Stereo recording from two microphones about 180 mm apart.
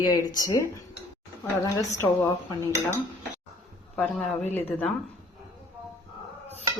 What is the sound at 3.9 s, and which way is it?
Speech, 5° left (ahead or behind).